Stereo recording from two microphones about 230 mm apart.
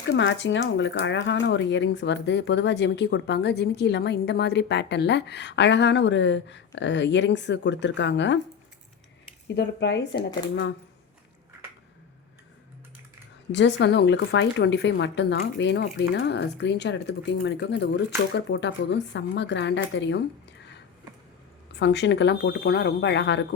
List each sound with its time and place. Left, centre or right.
0.1 s speech: left
9.6 s speech: left
13.5 s speech: left
21.8 s speech: left